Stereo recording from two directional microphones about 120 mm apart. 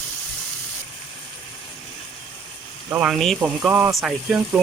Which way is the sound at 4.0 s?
5° right (ahead or behind).